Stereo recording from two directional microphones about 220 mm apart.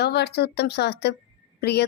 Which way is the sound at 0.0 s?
50° left (ahead or behind).